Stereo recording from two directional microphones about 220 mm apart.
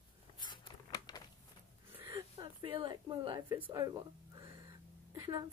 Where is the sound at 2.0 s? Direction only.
20° right (ahead or behind).